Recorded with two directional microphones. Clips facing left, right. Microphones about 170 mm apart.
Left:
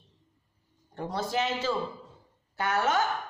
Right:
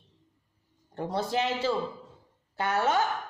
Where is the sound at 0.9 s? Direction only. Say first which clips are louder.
Right 1 dB; 30° right (ahead or behind).